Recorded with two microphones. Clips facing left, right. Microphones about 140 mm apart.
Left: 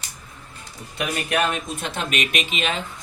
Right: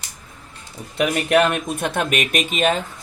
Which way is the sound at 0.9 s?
60° right (ahead or behind).